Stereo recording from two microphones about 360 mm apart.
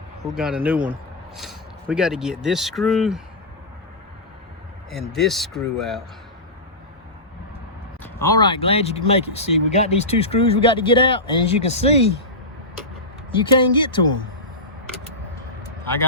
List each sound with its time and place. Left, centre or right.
0.2 s speech: centre
4.9 s speech: centre
8.0 s speech: centre
13.3 s speech: centre